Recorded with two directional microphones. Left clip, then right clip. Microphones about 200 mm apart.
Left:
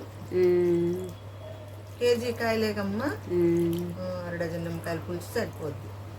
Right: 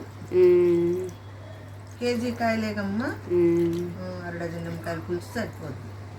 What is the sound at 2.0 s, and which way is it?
Speech, 45° left (ahead or behind).